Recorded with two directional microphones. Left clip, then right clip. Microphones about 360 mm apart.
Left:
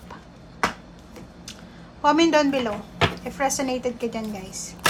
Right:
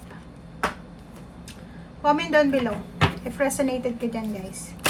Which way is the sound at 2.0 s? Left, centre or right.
Centre.